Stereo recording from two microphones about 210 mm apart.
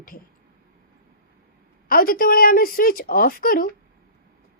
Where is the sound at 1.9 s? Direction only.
45° left (ahead or behind).